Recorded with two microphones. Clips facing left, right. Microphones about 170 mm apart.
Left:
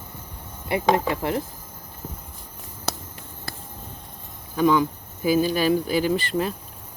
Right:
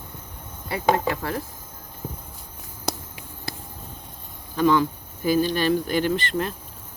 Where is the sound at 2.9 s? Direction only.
15° right (ahead or behind).